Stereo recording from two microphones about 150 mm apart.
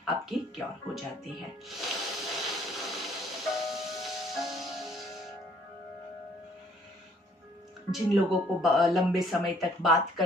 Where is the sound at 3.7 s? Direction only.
Centre (ahead or behind).